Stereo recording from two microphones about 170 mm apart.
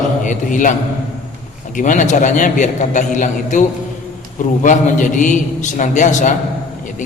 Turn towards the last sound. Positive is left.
turn(degrees=45)  # may be behind; listen again after turning